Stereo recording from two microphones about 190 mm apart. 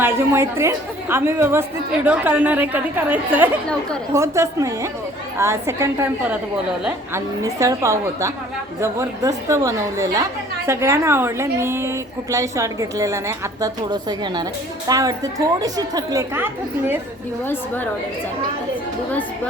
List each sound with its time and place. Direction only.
0.0 s a woman's voice: 15° right (ahead or behind)
17.4 s a woman's voice: 10° left (ahead or behind)